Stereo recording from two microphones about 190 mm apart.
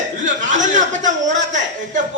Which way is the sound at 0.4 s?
40° right (ahead or behind).